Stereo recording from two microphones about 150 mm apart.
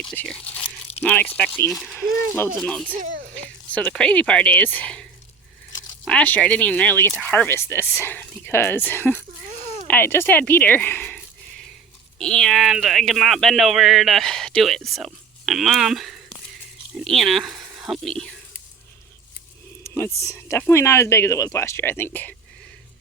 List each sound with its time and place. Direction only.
0.0 s speech: 5° left (ahead or behind)
0.6 s crunch: 45° left (ahead or behind)
1.0 s speech: 10° left (ahead or behind)
1.7 s speech: centre (ahead or behind)
6.1 s speech: 10° left (ahead or behind)
12.2 s speech: 5° left (ahead or behind)
19.8 s a sound: 15° left (ahead or behind)
20.3 s speech: 15° left (ahead or behind)